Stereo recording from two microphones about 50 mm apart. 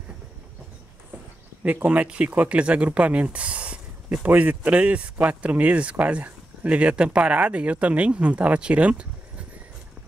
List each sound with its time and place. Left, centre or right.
1.6 s speech: right